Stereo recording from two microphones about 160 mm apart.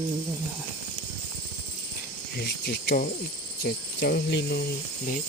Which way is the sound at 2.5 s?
90° left.